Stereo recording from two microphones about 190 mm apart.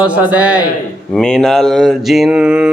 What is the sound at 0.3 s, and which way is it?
Speech, 5° right (ahead or behind).